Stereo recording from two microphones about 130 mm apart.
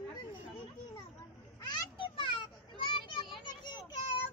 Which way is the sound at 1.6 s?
35° left (ahead or behind).